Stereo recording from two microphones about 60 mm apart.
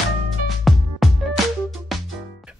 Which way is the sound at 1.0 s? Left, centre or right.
Centre.